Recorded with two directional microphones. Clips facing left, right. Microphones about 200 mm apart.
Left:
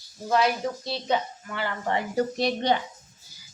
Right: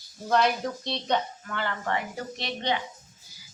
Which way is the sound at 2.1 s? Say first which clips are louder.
Left 10 dB; 40° left (ahead or behind).